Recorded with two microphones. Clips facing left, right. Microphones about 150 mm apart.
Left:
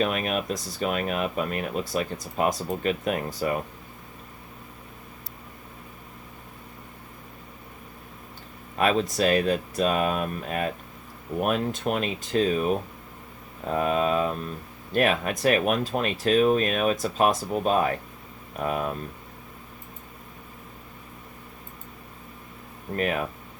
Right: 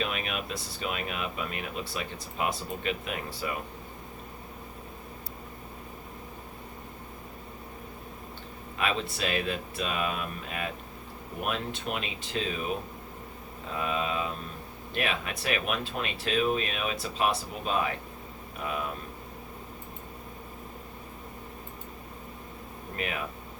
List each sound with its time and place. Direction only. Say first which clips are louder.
0.0 s speech: left 7 dB; 45° left (ahead or behind)
8.8 s speech: left 8 dB; 40° left (ahead or behind)
23.0 s speech: left 8 dB; 45° left (ahead or behind)